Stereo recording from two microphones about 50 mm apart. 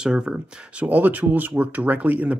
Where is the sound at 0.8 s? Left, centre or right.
Right.